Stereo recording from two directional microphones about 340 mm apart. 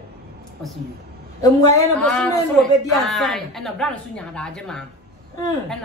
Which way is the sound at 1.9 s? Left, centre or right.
Centre.